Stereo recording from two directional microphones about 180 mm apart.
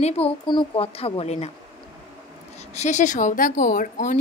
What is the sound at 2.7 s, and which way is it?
A woman's voice, 40° left (ahead or behind).